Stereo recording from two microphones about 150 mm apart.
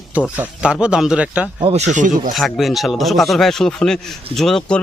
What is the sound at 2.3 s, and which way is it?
Speech, centre (ahead or behind).